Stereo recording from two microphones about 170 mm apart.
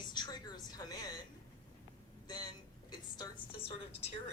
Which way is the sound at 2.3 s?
25° left (ahead or behind).